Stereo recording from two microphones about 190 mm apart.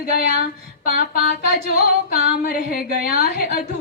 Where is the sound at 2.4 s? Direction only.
55° left (ahead or behind).